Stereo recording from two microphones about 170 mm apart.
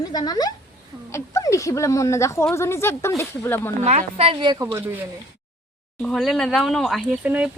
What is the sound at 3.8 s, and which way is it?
A woman's voice, 40° right (ahead or behind).